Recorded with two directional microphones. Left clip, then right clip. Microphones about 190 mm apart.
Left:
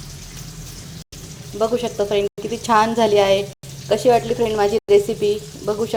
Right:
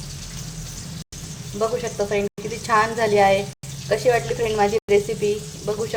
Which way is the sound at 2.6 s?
25° left (ahead or behind).